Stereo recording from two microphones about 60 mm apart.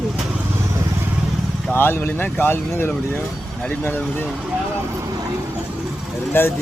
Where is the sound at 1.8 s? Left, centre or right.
Left.